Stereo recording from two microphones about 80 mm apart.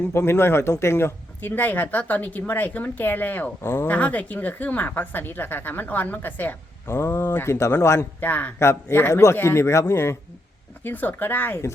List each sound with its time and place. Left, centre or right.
0.1 s speech: left
8.2 s speech: left
8.5 s speech: left